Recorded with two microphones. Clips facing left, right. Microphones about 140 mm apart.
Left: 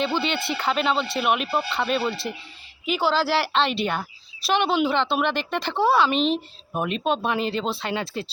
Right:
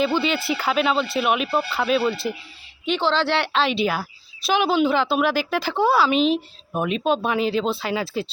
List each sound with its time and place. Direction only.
0.0 s a woman's voice: centre (ahead or behind)